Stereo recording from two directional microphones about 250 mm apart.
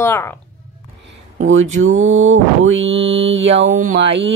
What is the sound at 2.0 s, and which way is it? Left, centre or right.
Mantra, right.